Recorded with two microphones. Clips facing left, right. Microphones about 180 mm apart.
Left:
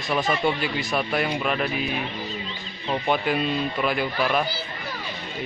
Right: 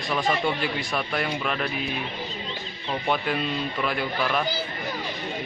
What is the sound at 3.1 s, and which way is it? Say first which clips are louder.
Speech: left 2 dB; 10° left (ahead or behind).